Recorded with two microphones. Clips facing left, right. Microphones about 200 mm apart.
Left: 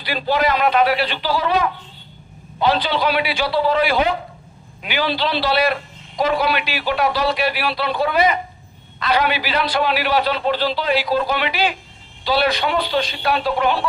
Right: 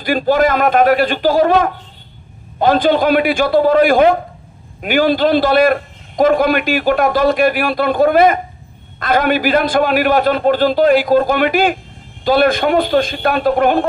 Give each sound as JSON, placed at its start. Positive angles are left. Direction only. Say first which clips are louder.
{"t": 0.0, "sound": "a man's voice", "louder": "right 7 dB", "side_deg": -45}